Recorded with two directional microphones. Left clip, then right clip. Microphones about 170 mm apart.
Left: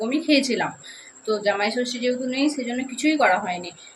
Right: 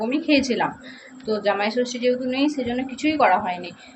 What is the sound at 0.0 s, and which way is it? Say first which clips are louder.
Speech: even; 25° left (ahead or behind).